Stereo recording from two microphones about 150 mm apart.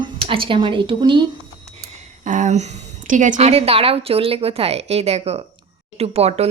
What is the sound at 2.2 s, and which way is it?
A woman's voice, 55° right (ahead or behind).